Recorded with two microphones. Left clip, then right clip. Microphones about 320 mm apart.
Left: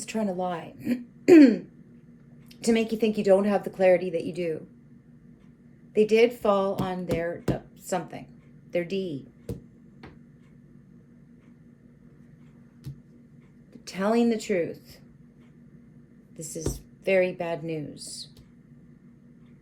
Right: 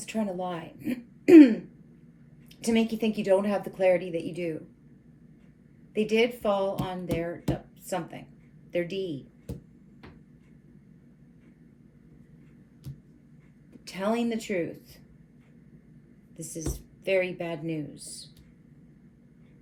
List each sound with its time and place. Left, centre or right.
0.0 s a woman's voice: centre
2.5 s a woman's voice: centre
5.9 s a woman's voice: centre
13.8 s a woman's voice: centre
16.4 s a woman's voice: centre